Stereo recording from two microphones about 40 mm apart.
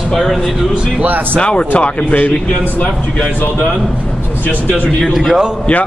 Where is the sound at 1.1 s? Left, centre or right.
Right.